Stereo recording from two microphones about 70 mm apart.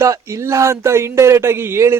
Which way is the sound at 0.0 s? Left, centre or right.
Right.